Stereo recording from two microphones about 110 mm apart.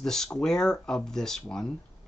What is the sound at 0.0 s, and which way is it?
Speech, 5° left (ahead or behind).